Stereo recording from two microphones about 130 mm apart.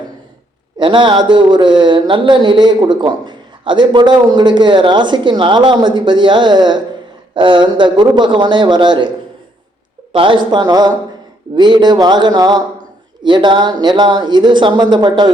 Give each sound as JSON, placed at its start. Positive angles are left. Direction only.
{"t": 0.8, "sound": "speech", "side_deg": -40}